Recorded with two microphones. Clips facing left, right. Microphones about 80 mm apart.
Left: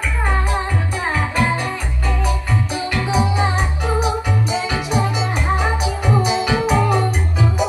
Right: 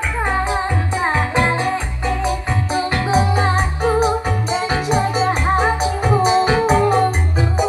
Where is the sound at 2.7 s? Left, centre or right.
Right.